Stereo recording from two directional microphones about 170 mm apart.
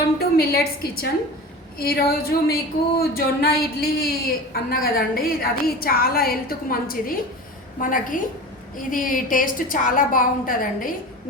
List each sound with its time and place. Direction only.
0.2 s a woman's voice: 65° left (ahead or behind)